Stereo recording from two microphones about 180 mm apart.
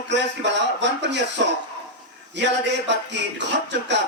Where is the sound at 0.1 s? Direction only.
75° right (ahead or behind).